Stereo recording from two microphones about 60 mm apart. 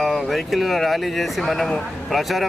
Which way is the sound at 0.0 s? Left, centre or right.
Centre.